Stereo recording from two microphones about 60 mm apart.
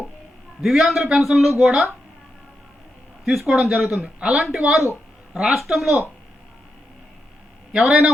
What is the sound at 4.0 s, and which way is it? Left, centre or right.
A man's voice, centre.